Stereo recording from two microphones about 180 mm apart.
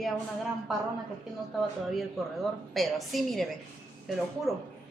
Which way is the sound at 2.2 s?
Centre (ahead or behind).